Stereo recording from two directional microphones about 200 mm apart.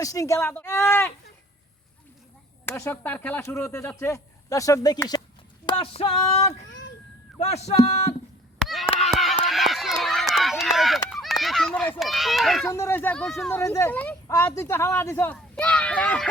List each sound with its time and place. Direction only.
0.0 s speech: 15° left (ahead or behind)
2.6 s speech: 10° left (ahead or behind)
5.6 s a sound: 30° left (ahead or behind)
7.3 s speech: 35° left (ahead or behind)
8.6 s chop: centre (ahead or behind)
8.9 s hands: 30° left (ahead or behind)
9.1 s run: centre (ahead or behind)
12.6 s speech: 15° left (ahead or behind)